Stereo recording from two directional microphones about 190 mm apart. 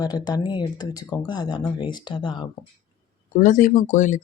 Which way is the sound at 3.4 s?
45° left (ahead or behind).